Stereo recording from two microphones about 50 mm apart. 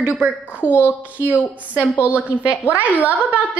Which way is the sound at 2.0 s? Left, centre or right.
Right.